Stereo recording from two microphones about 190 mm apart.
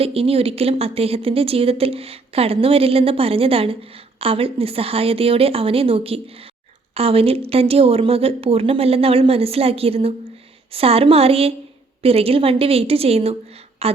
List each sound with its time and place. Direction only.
0.0 s speech: 30° right (ahead or behind)